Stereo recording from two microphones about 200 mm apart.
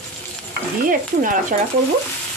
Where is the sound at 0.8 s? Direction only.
40° right (ahead or behind).